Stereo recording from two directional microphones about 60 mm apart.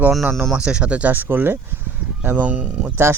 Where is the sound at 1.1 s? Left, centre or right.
Right.